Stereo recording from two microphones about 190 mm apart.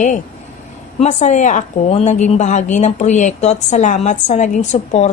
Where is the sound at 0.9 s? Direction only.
40° left (ahead or behind).